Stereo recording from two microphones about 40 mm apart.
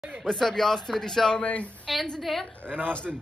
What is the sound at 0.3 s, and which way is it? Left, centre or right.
Speech, centre.